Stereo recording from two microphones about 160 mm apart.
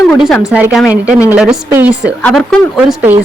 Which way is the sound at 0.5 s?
10° right (ahead or behind).